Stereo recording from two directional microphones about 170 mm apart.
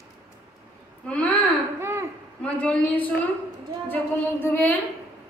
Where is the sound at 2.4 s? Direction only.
5° left (ahead or behind).